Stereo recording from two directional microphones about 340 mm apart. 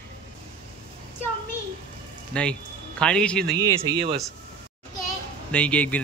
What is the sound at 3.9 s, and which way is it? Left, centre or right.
Speech, centre.